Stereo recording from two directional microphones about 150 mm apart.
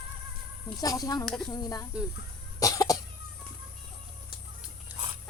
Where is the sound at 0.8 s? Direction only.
25° left (ahead or behind).